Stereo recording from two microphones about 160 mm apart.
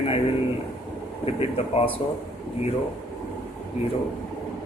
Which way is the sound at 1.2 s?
40° left (ahead or behind).